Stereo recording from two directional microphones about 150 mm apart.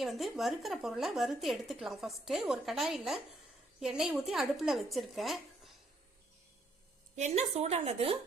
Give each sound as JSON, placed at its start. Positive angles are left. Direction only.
{"t": 0.0, "sound": "a woman's voice", "side_deg": 0}
{"t": 7.2, "sound": "a woman's voice", "side_deg": -45}